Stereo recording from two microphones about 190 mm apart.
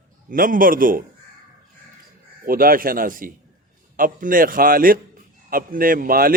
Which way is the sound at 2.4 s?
50° right (ahead or behind).